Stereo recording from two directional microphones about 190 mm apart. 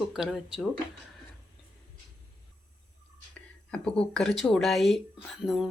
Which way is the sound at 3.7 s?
5° left (ahead or behind).